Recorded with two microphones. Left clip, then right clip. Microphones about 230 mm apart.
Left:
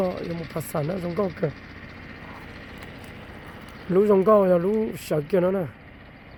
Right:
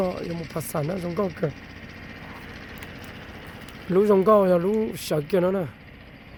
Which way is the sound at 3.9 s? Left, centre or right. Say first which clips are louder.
Even; centre.